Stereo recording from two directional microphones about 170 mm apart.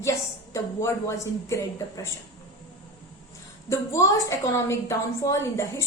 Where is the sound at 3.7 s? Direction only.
20° left (ahead or behind).